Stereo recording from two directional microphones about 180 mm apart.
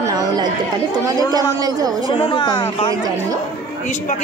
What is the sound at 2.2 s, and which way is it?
Speech, 25° left (ahead or behind).